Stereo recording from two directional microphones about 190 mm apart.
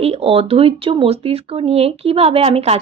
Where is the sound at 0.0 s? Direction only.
30° right (ahead or behind).